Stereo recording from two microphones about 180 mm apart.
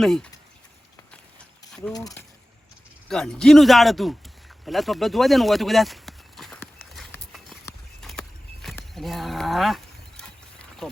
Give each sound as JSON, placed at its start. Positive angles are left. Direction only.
{"t": 0.0, "sound": "speech", "side_deg": 0}
{"t": 1.9, "sound": "speech", "side_deg": 20}
{"t": 3.1, "sound": "speech", "side_deg": 5}
{"t": 4.6, "sound": "a sound", "side_deg": 0}
{"t": 8.0, "sound": "horse", "side_deg": 5}
{"t": 9.0, "sound": "a sound", "side_deg": 0}